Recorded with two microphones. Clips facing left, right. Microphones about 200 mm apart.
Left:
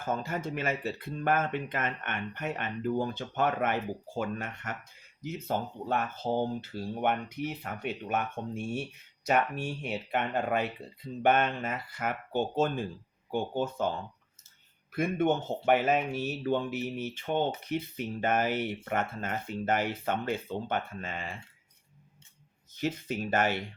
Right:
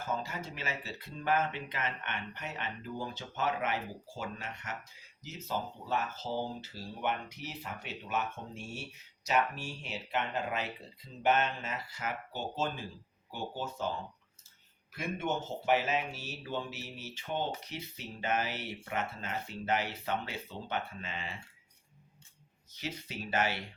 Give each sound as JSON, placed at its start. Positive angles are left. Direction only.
{"t": 0.0, "sound": "speech", "side_deg": 55}
{"t": 14.9, "sound": "speech", "side_deg": 55}
{"t": 22.7, "sound": "speech", "side_deg": 50}